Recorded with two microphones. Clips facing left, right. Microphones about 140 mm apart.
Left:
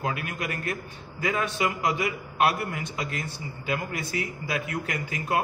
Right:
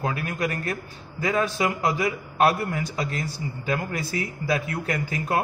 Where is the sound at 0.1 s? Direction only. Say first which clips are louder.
Right 4 dB; 35° right (ahead or behind).